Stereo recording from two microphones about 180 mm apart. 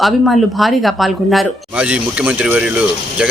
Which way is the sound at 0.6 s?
Centre (ahead or behind).